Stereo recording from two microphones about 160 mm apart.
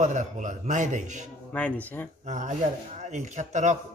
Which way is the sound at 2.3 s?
50° right (ahead or behind).